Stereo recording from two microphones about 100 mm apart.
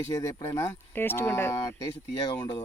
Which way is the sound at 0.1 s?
35° left (ahead or behind).